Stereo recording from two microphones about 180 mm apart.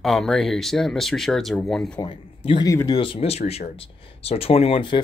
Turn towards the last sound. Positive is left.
turn(degrees=30)  # may be behind; listen again after turning